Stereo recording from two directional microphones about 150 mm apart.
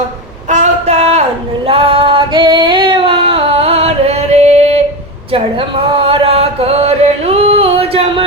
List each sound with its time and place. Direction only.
0.4 s a sound: 50° right (ahead or behind)
1.6 s female singing: 40° right (ahead or behind)
5.3 s chant: 35° right (ahead or behind)